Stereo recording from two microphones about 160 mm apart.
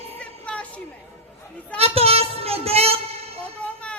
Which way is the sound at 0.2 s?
5° left (ahead or behind).